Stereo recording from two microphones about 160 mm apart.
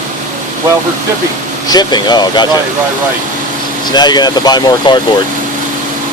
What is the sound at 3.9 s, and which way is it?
Speech, 25° left (ahead or behind).